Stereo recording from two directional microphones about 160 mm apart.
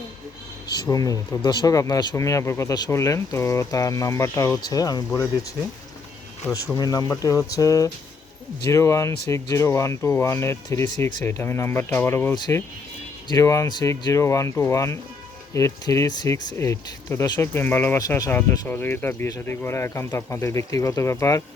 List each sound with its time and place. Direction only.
0.7 s speech: 25° left (ahead or behind)
6.7 s speech: 20° left (ahead or behind)